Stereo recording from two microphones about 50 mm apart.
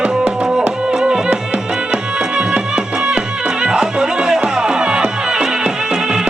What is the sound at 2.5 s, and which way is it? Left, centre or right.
Music, centre.